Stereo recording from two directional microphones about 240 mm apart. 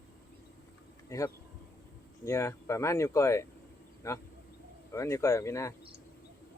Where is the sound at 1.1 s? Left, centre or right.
Centre.